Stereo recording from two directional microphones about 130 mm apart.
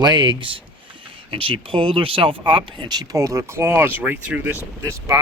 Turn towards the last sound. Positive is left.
turn(degrees=-20)  # may be behind; listen again after turning